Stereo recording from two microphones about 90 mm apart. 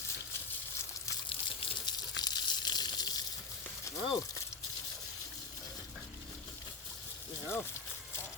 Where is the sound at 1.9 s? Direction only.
50° left (ahead or behind).